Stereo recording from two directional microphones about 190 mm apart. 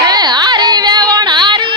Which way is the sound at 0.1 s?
20° right (ahead or behind).